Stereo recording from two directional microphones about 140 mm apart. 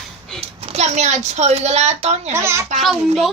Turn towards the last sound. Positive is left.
turn(degrees=0)  # may be behind; listen again after turning